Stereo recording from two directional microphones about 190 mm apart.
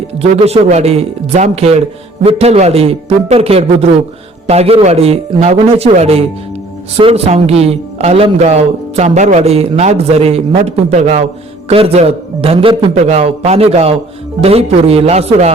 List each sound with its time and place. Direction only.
0.2 s a man's voice: 30° right (ahead or behind)